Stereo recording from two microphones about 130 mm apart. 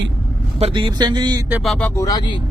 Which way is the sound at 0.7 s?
35° right (ahead or behind).